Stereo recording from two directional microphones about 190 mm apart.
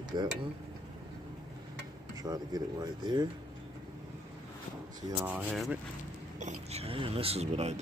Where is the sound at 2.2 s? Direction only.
20° right (ahead or behind).